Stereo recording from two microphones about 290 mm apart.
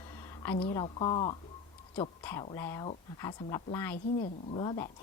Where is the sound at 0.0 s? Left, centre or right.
Centre.